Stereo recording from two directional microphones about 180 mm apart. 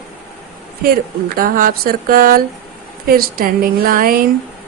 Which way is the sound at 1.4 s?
55° right (ahead or behind).